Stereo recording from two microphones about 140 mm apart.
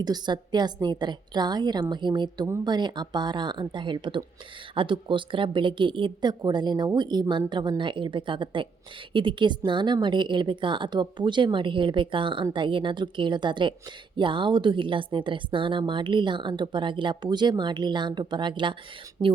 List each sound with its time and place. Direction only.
0.0 s speech: 30° right (ahead or behind)